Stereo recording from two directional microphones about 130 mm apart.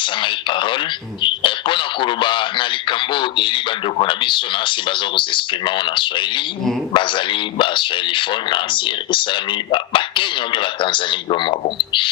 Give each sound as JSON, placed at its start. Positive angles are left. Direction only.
{"t": 0.0, "sound": "speech", "side_deg": 40}